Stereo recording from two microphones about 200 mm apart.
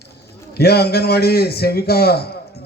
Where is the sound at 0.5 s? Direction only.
55° left (ahead or behind).